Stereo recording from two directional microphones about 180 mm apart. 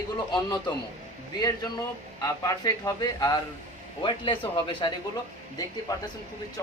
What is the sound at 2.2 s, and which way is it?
Speech, 20° left (ahead or behind).